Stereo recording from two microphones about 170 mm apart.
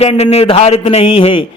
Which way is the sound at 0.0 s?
35° left (ahead or behind).